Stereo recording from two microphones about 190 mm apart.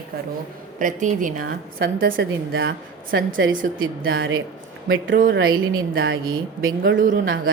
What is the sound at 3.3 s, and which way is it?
Speech, 90° right.